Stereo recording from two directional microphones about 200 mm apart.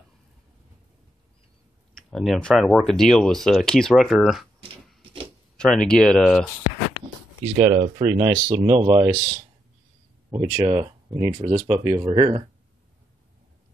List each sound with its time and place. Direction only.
2.0 s speech: centre (ahead or behind)
5.6 s speech: 5° left (ahead or behind)
7.5 s speech: 30° right (ahead or behind)
10.3 s speech: 15° right (ahead or behind)